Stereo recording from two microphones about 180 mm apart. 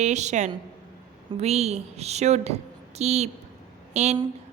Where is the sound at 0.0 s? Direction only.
40° right (ahead or behind).